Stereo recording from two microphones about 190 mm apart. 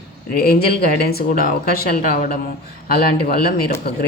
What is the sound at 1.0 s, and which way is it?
Speech, 55° left (ahead or behind).